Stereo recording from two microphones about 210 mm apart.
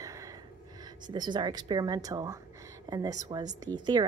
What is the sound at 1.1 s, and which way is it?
A woman's voice, 20° right (ahead or behind).